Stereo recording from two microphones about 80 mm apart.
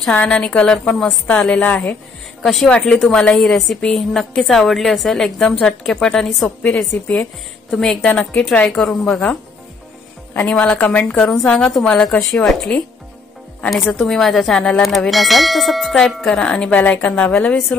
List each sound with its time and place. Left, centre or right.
0.1 s a woman's voice: centre
2.4 s clang: centre
5.4 s a woman's voice: centre
7.7 s clang: centre
8.1 s a woman's voice: centre
10.4 s clang: centre
10.7 s a woman's voice: left
11.2 s a woman's voice: centre
14.0 s clang: centre